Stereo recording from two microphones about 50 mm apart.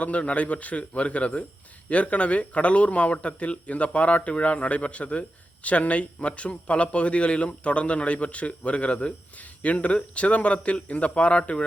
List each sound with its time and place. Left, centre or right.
0.0 s a man's voice: left